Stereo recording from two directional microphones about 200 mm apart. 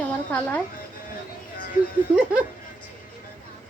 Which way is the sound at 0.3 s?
10° left (ahead or behind).